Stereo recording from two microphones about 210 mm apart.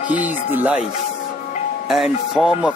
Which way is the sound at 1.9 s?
Centre (ahead or behind).